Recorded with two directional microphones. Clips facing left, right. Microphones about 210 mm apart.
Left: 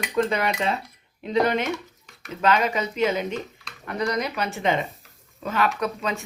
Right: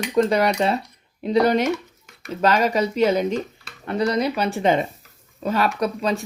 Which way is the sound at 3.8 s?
30° right (ahead or behind).